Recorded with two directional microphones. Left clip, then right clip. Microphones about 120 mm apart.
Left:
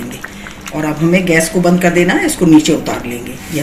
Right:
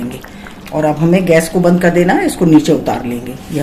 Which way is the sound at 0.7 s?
55° right (ahead or behind).